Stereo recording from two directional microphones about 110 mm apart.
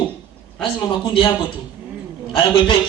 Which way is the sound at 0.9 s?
40° left (ahead or behind).